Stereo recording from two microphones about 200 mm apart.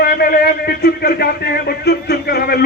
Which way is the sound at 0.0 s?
50° left (ahead or behind).